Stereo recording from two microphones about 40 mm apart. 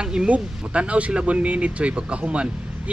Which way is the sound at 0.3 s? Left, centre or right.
Right.